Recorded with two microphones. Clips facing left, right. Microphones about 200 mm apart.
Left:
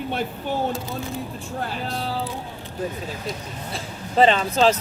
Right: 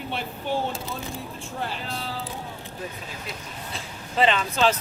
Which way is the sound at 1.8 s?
40° left (ahead or behind).